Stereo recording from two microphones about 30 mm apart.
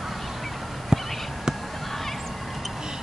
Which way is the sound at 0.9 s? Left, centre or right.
Right.